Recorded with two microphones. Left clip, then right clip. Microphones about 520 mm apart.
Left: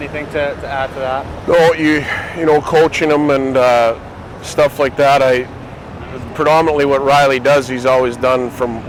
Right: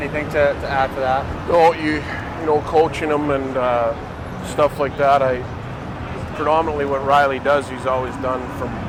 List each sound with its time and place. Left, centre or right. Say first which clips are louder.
0.3 s speech: right 1 dB; left
2.5 s speech: left 5 dB; left
4.5 s speech: left 5 dB; left
6.4 s speech: left 7 dB; left
7.9 s speech: left 10 dB; left